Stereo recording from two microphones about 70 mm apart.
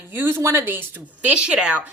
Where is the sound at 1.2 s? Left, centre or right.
Centre.